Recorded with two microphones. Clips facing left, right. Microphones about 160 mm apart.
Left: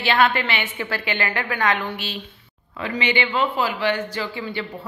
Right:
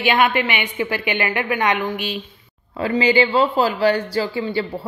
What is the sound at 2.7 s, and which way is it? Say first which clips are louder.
A man's voice: right 7 dB; 35° right (ahead or behind).